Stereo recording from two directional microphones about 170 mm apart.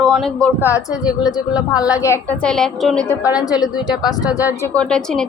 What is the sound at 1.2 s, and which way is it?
A woman's voice, 25° left (ahead or behind).